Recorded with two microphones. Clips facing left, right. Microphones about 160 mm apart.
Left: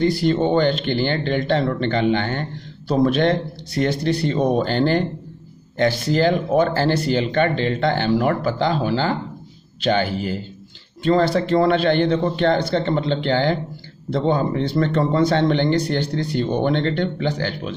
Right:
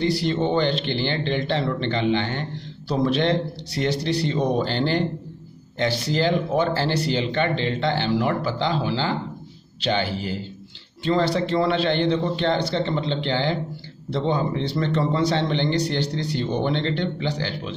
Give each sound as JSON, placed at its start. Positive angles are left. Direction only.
{"t": 0.0, "sound": "speech", "side_deg": 50}